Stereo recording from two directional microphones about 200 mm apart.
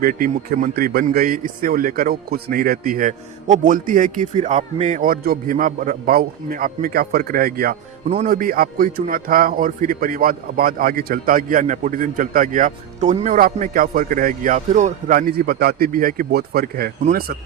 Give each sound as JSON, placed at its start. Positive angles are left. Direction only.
{"t": 0.0, "sound": "a man's voice", "side_deg": -45}